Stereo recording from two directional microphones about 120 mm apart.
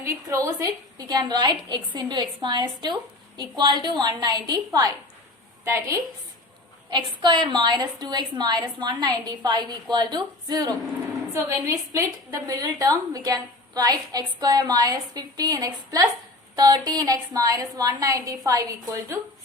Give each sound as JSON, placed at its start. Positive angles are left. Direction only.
{"t": 0.0, "sound": "a woman's voice", "side_deg": -25}
{"t": 6.9, "sound": "a woman's voice", "side_deg": -40}
{"t": 11.3, "sound": "a woman's voice", "side_deg": -20}